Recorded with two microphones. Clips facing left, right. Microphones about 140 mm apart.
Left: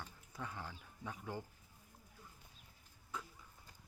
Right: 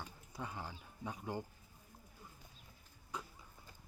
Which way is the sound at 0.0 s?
15° right (ahead or behind).